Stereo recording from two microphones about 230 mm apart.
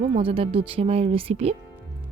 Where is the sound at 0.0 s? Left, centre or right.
Right.